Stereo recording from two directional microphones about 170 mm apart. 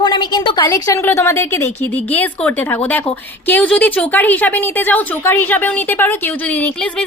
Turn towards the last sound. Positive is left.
turn(degrees=5)  # may be behind; listen again after turning